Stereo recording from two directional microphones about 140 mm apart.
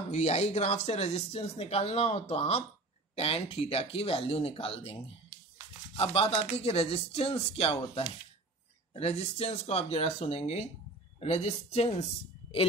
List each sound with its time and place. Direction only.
0.1 s speech: 50° left (ahead or behind)
5.9 s speech: 45° left (ahead or behind)